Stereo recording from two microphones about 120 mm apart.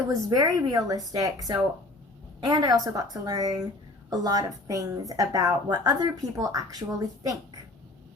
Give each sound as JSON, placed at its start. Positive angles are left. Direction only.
{"t": 0.1, "sound": "speech", "side_deg": -30}